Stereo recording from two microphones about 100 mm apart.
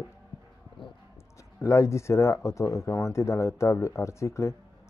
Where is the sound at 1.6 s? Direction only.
30° left (ahead or behind).